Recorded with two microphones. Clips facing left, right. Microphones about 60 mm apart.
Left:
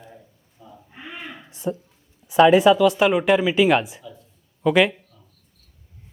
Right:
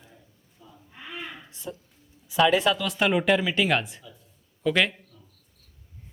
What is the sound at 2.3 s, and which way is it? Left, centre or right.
Speech, left.